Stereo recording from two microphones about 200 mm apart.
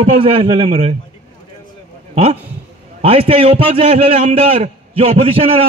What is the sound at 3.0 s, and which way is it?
A man's voice, 30° right (ahead or behind).